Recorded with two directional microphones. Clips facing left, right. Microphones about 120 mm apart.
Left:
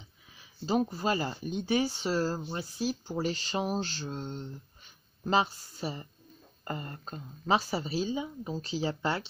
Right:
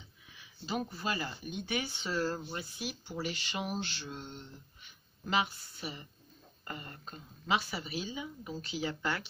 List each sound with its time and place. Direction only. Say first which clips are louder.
0.4 s speech: left 8 dB; 35° left (ahead or behind)